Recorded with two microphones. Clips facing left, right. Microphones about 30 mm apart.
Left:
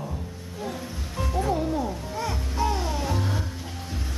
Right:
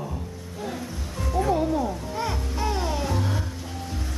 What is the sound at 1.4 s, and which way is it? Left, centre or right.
Music, centre.